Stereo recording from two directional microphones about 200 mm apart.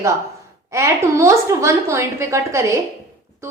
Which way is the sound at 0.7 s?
15° right (ahead or behind).